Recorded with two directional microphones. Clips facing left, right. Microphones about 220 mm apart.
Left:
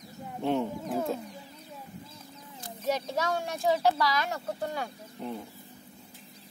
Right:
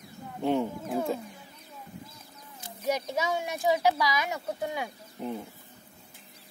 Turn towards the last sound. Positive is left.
turn(degrees=-5)  # may be behind; listen again after turning